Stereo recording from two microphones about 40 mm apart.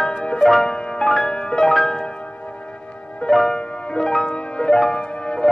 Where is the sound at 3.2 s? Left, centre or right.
Centre.